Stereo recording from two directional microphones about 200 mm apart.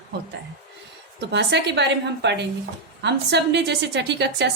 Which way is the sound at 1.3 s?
60° right (ahead or behind).